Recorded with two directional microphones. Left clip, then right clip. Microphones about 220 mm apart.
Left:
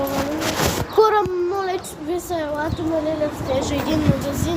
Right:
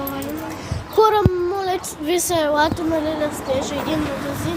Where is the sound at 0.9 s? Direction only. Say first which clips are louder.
Right 1 dB; 20° right (ahead or behind).